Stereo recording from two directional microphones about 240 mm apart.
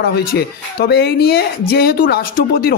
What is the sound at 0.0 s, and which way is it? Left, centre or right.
Speech, left.